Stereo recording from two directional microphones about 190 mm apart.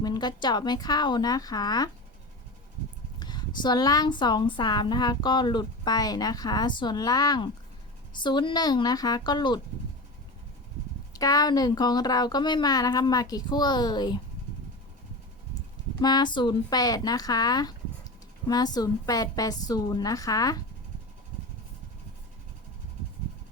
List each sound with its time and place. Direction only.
0.0 s a woman's voice: 20° left (ahead or behind)
3.2 s a woman's voice: 25° left (ahead or behind)
11.1 s a woman's voice: 20° left (ahead or behind)
16.0 s a woman's voice: 20° left (ahead or behind)